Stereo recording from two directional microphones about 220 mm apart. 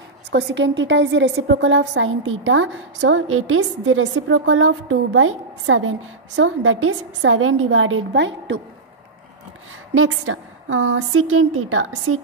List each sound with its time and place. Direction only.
0.3 s a woman's voice: 50° right (ahead or behind)
9.9 s a woman's voice: 65° right (ahead or behind)